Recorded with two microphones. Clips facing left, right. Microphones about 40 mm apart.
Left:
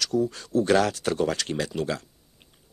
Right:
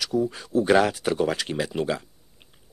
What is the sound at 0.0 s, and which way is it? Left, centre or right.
Speech, centre.